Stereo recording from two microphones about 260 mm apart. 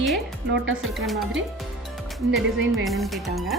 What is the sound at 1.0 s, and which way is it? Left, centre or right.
Speech, centre.